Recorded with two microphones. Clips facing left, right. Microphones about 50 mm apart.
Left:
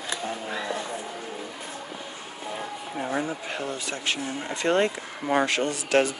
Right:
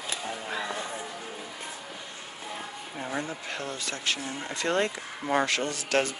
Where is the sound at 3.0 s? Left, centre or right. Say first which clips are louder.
Left 5 dB; centre.